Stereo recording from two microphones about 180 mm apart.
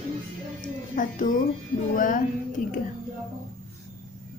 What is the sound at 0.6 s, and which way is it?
Music, 45° left (ahead or behind).